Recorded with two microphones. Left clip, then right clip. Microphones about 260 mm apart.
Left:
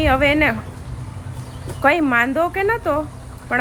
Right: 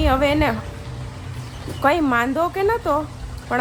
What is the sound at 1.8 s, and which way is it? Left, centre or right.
Speech, centre.